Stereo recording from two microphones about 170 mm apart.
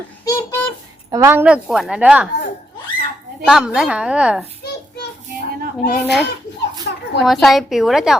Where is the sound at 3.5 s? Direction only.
5° right (ahead or behind).